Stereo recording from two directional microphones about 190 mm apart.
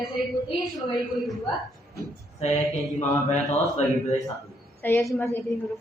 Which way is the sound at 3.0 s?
35° left (ahead or behind).